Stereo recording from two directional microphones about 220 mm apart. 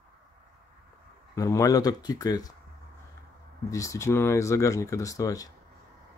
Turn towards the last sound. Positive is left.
turn(degrees=15)  # may be behind; listen again after turning